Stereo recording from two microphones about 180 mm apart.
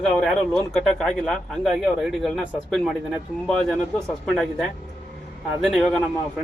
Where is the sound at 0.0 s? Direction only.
Centre (ahead or behind).